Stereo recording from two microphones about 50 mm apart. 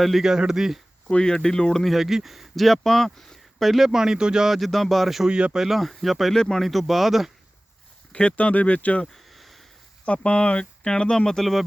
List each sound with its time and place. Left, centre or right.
0.0 s speech: centre
1.1 s speech: centre
1.8 s speech: centre
4.4 s speech: centre
6.3 s speech: centre
6.7 s speech: centre
8.1 s speech: left
9.1 s a sound: centre
10.1 s speech: left
11.3 s speech: centre